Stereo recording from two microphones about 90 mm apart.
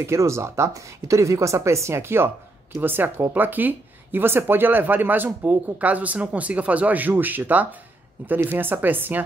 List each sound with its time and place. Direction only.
0.0 s speech: 30° right (ahead or behind)